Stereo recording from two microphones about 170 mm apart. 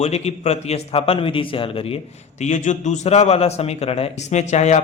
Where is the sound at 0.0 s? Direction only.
40° left (ahead or behind).